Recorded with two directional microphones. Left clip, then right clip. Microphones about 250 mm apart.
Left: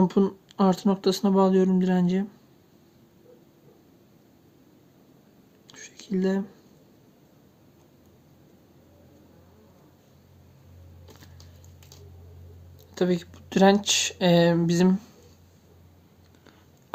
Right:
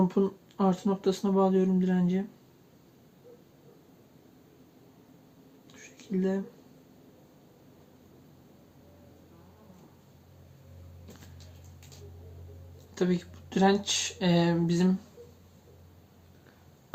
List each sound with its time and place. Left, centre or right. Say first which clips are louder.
0.0 s speech: left 4 dB; left
5.6 s a sound: left 5 dB; left
12.9 s speech: left 4 dB; left